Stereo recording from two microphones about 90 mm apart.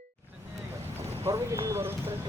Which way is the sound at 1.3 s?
30° right (ahead or behind).